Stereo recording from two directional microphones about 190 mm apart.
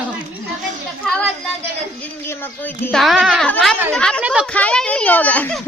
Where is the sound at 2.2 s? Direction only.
10° left (ahead or behind); by 4.4 s 5° right (ahead or behind).